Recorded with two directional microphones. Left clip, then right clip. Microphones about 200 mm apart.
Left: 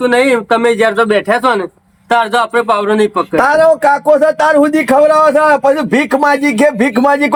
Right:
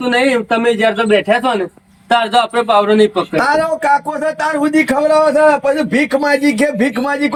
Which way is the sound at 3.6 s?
30° left (ahead or behind).